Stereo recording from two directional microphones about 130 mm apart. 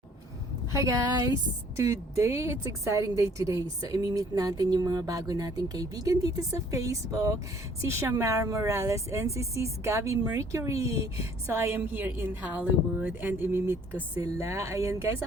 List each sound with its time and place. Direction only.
0.7 s a woman's voice: 25° right (ahead or behind)